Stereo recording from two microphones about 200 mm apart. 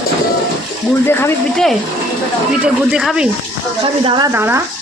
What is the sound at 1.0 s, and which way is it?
A woman's voice, 10° left (ahead or behind).